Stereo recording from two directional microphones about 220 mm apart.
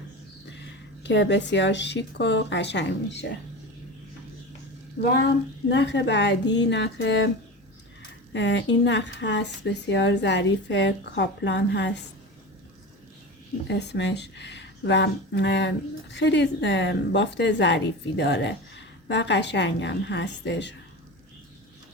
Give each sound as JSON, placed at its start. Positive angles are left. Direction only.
{"t": 0.6, "sound": "speech", "side_deg": 55}
{"t": 5.6, "sound": "speech", "side_deg": 55}
{"t": 8.3, "sound": "speech", "side_deg": 55}
{"t": 13.7, "sound": "speech", "side_deg": 50}